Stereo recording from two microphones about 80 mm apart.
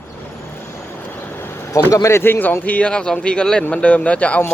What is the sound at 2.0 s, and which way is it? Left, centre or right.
A man's voice, left.